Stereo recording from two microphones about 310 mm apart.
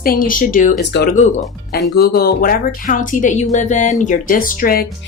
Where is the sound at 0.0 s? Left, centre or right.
Left.